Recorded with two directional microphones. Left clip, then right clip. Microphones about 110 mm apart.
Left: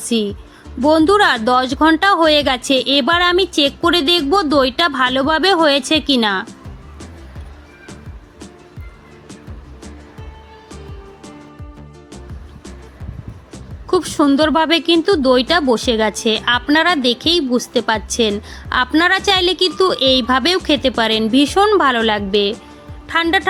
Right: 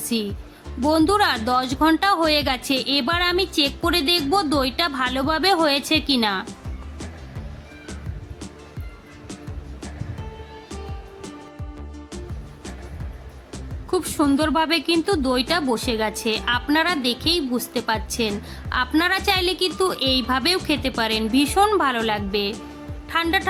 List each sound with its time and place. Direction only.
0.1 s speech: 25° left (ahead or behind)
13.9 s a woman's voice: 25° left (ahead or behind)